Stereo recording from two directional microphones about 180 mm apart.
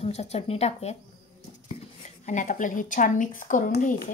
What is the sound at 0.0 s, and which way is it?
Speech, 35° left (ahead or behind).